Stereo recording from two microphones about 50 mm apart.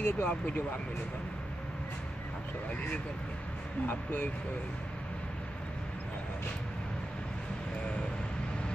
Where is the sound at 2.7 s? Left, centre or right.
Left.